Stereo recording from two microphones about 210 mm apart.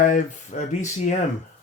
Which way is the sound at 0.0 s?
35° left (ahead or behind).